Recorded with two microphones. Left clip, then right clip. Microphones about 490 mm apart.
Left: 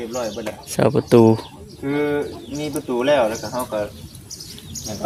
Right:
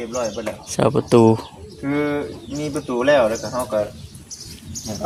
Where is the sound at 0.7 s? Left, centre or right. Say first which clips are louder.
Left 1 dB; left.